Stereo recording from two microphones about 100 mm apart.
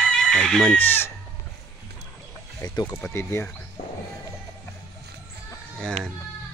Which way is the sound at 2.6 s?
40° left (ahead or behind).